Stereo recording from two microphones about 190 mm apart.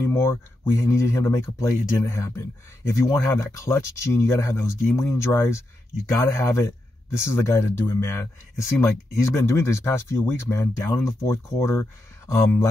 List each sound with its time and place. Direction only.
0.0 s speech: 15° left (ahead or behind)